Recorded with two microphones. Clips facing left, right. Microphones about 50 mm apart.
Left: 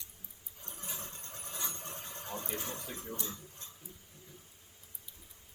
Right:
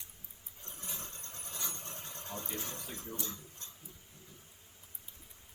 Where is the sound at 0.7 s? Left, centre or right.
Left.